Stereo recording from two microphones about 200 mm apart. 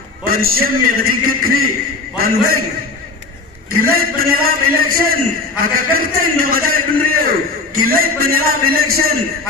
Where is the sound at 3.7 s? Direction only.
45° right (ahead or behind).